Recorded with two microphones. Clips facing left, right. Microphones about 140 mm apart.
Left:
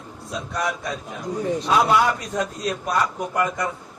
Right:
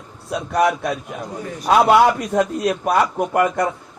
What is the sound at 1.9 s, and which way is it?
A man's voice, 60° right (ahead or behind).